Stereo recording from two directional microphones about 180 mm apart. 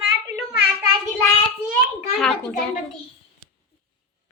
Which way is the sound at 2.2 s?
5° left (ahead or behind).